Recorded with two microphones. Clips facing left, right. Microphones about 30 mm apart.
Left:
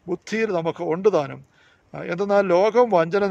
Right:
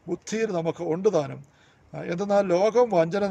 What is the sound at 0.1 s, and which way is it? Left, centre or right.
A man's voice, left.